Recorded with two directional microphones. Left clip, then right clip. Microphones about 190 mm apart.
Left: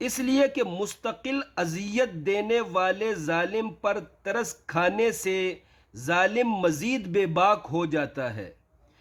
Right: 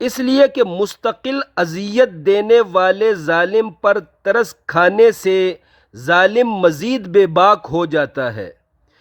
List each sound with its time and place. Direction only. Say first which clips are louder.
0.0 s speech: right 11 dB; 40° right (ahead or behind)